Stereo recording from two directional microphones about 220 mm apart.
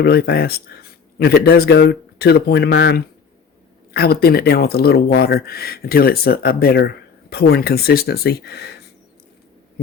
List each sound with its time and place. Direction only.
0.0 s speech: 45° left (ahead or behind)